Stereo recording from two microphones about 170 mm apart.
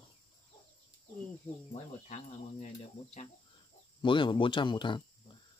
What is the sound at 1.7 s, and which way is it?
Speech, 45° left (ahead or behind).